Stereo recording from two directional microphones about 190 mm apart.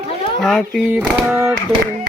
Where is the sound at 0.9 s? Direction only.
10° right (ahead or behind).